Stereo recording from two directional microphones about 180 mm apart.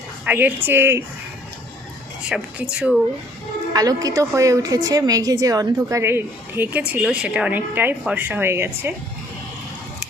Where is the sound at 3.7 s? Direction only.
20° right (ahead or behind).